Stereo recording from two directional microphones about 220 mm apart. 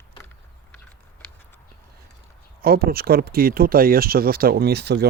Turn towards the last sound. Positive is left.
turn(degrees=-50)  # may be behind; listen again after turning